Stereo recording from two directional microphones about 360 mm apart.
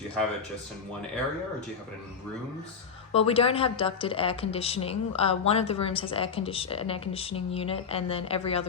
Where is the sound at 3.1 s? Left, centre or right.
Centre.